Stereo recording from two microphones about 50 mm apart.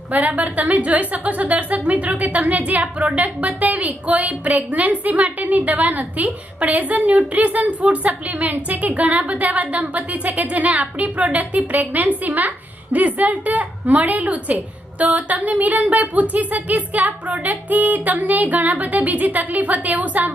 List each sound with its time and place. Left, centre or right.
0.1 s a woman's voice: right